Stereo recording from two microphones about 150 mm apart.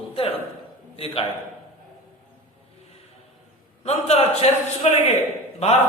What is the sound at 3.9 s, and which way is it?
A man's voice, 45° left (ahead or behind).